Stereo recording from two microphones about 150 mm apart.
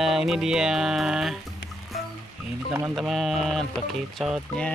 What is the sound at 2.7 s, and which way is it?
Speech, 15° right (ahead or behind).